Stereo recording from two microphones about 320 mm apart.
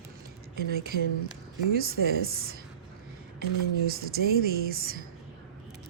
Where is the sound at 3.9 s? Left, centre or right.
Right.